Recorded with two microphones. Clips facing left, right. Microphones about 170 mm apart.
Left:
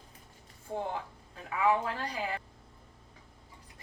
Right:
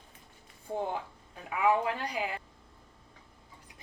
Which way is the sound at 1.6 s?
15° right (ahead or behind).